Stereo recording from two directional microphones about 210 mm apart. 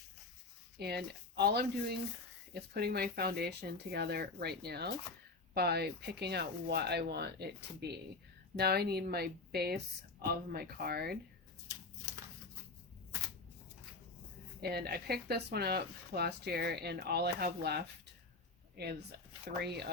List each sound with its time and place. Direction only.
0.8 s speech: 50° right (ahead or behind)
14.6 s speech: 50° right (ahead or behind)